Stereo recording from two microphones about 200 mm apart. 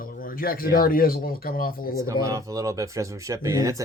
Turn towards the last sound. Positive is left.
turn(degrees=-15)  # may be behind; listen again after turning